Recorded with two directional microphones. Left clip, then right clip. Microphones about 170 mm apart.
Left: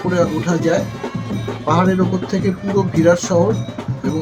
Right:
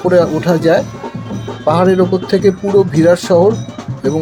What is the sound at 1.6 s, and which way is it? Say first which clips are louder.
Speech: right 6 dB; 45° right (ahead or behind).